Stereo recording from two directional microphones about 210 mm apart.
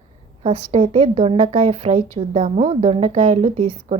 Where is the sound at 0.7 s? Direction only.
30° right (ahead or behind).